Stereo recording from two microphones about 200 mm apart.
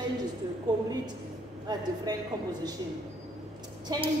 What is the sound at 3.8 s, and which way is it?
Speech, 25° right (ahead or behind).